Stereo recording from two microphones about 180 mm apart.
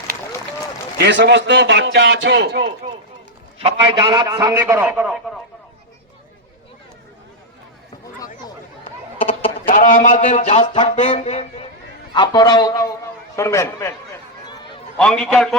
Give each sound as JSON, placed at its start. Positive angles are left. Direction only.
{"t": 0.9, "sound": "a man's voice", "side_deg": -80}
{"t": 3.6, "sound": "a man's voice", "side_deg": -30}
{"t": 4.5, "sound": "a man's voice", "side_deg": -10}
{"t": 9.6, "sound": "speech", "side_deg": 50}
{"t": 12.1, "sound": "a man's voice", "side_deg": 25}
{"t": 14.9, "sound": "a man's voice", "side_deg": 5}